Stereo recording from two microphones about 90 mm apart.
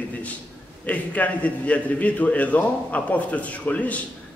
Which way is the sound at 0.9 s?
15° left (ahead or behind).